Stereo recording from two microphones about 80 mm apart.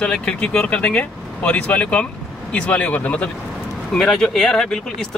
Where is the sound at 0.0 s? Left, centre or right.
Centre.